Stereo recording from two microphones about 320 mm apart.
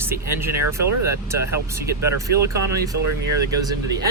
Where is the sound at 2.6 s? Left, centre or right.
Right.